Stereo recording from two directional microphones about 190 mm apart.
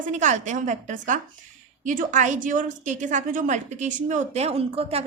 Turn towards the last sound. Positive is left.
turn(degrees=-30)  # may be behind; listen again after turning